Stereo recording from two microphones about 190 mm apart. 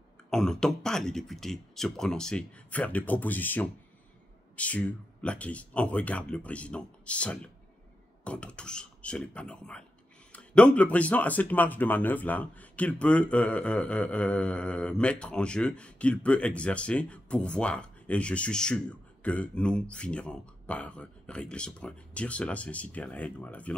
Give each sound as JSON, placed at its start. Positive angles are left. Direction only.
{"t": 0.3, "sound": "speech", "side_deg": 5}